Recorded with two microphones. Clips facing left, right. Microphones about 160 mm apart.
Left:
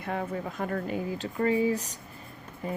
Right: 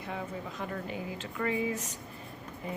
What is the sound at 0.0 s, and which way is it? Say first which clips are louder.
Speech: left 6 dB; 55° left (ahead or behind).